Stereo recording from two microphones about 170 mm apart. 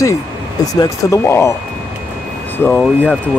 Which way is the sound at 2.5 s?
10° left (ahead or behind).